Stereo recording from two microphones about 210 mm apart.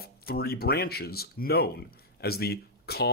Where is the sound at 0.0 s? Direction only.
45° left (ahead or behind).